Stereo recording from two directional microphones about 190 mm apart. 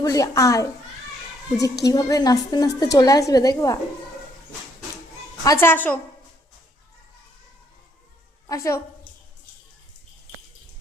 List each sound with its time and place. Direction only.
0.0 s a child's voice: 20° left (ahead or behind)
1.8 s a woman's voice: 20° left (ahead or behind)
5.5 s a child's voice: 10° left (ahead or behind)
8.4 s a child's voice: 15° left (ahead or behind)